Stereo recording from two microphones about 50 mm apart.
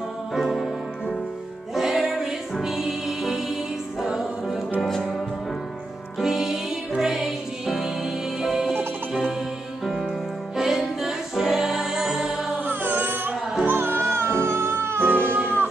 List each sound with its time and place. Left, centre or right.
0.3 s music: centre
1.7 s music: centre
6.1 s music: centre
9.8 s music: centre
12.5 s music: right